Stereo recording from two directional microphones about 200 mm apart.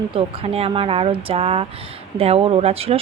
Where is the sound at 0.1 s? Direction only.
30° right (ahead or behind).